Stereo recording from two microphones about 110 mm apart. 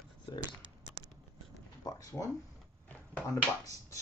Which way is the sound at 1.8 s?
40° left (ahead or behind).